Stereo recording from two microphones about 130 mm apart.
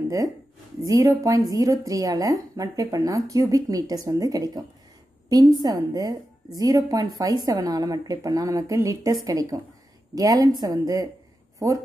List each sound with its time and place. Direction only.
0.8 s a woman's voice: 25° right (ahead or behind)